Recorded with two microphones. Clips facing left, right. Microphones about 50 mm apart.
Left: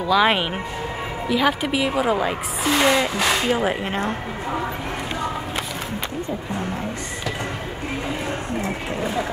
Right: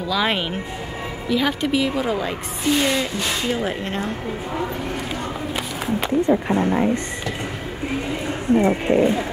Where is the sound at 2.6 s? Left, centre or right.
Left.